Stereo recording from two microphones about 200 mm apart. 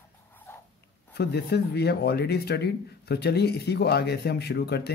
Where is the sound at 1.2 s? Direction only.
55° left (ahead or behind).